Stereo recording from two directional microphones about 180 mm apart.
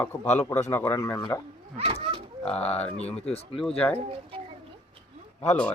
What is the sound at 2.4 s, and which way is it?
Speech, 5° left (ahead or behind).